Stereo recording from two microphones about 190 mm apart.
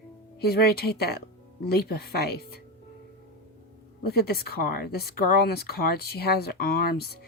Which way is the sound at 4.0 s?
55° left (ahead or behind).